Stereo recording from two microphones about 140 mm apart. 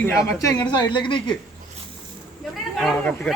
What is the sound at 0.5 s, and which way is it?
Speech, 30° left (ahead or behind).